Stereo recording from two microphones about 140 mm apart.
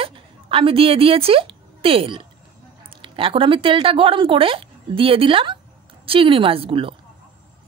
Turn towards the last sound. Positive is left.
turn(degrees=-40)  # may be behind; listen again after turning